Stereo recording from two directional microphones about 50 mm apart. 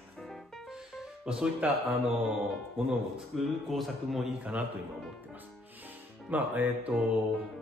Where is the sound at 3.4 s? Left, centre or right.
Centre.